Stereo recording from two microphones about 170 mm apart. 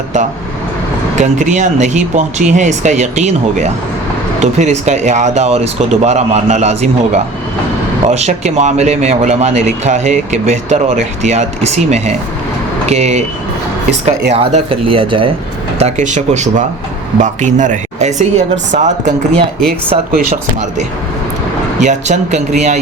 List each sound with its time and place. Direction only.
1.2 s speech: 45° right (ahead or behind)
14.3 s speech: 35° right (ahead or behind)
15.8 s speech: 45° right (ahead or behind)
20.1 s speech: 45° right (ahead or behind)